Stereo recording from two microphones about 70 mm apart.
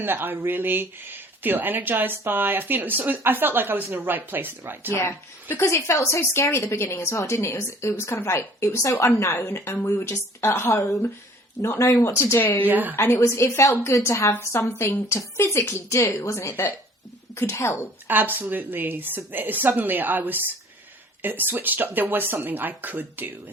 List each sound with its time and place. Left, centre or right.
0.0 s speech: right
5.5 s a woman's voice: left
10.0 s a woman's voice: left
11.8 s a woman's voice: left
12.4 s speech: left
12.6 s speech: right
13.0 s a woman's voice: left
17.3 s a woman's voice: left
18.1 s speech: right